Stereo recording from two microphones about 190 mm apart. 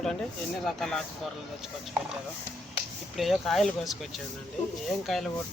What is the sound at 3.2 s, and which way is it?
Speech, centre (ahead or behind).